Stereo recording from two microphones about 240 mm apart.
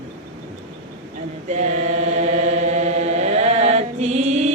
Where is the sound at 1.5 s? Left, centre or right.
Right.